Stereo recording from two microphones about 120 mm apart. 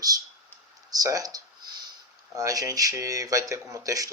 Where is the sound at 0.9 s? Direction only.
30° right (ahead or behind).